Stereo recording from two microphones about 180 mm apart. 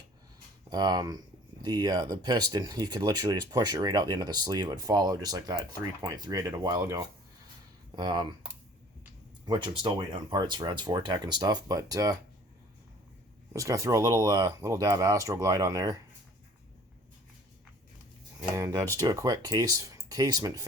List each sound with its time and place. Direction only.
0.7 s speech: 20° right (ahead or behind)
9.5 s speech: 25° right (ahead or behind)
13.5 s speech: 20° right (ahead or behind)
18.5 s speech: 20° right (ahead or behind)